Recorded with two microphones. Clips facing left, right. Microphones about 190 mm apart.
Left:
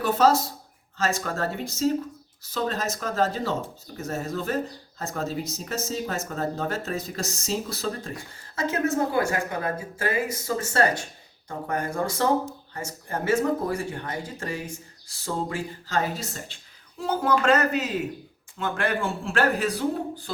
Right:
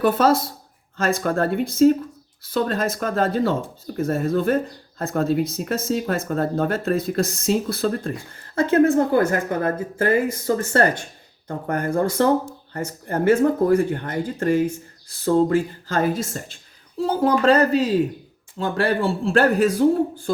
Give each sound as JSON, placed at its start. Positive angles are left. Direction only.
{"t": 0.0, "sound": "speech", "side_deg": -55}
{"t": 17.2, "sound": "a man's voice", "side_deg": -35}